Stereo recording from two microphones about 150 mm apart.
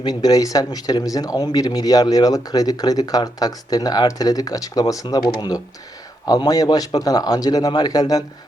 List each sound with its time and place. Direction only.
0.0 s speech: 25° left (ahead or behind)